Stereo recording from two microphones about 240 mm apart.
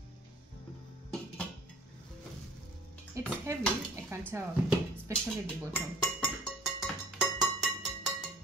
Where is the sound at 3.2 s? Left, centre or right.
Centre.